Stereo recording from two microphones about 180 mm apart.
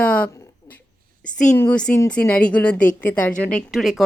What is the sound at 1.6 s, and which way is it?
Speech, 5° left (ahead or behind).